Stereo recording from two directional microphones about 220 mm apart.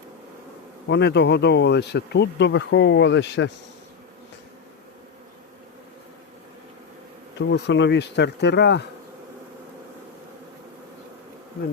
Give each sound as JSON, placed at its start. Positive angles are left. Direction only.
{"t": 0.9, "sound": "bee", "side_deg": 50}
{"t": 7.3, "sound": "bee", "side_deg": 55}